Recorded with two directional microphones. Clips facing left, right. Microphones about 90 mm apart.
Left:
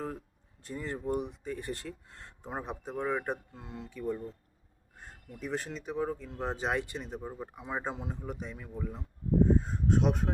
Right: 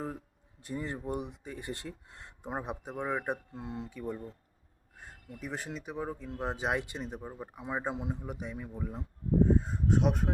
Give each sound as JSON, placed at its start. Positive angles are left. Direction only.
{"t": 0.6, "sound": "speech", "side_deg": -15}
{"t": 3.5, "sound": "speech", "side_deg": -25}
{"t": 4.9, "sound": "speech", "side_deg": -5}
{"t": 7.2, "sound": "speech", "side_deg": -5}
{"t": 9.6, "sound": "speech", "side_deg": -5}